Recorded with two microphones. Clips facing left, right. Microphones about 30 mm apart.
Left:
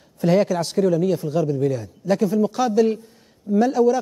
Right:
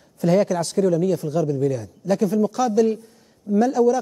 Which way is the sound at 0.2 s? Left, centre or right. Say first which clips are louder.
Even; left.